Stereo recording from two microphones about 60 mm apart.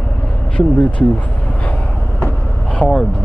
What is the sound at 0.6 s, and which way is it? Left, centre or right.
Speech, centre.